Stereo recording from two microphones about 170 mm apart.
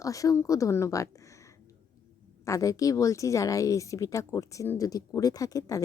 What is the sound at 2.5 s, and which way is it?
Speech, 20° left (ahead or behind).